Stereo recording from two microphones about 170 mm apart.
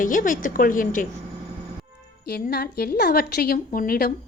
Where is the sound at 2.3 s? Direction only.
65° left (ahead or behind).